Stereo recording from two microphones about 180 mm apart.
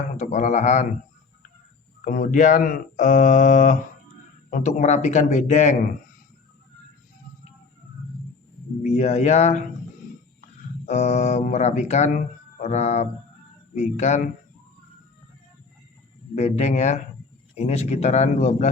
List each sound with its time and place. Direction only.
0.2 s speech: 40° left (ahead or behind)
2.0 s speech: 45° left (ahead or behind)
8.8 s speech: 40° left (ahead or behind)
10.8 s speech: 40° left (ahead or behind)
16.3 s speech: 40° left (ahead or behind)